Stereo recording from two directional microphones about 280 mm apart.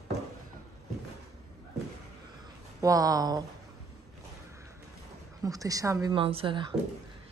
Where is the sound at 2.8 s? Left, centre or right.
Centre.